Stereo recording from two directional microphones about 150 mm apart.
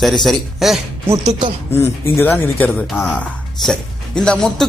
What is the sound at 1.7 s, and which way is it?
A man's voice, 15° left (ahead or behind).